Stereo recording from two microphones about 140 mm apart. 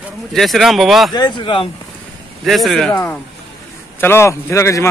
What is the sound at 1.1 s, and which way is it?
Speech, 30° left (ahead or behind).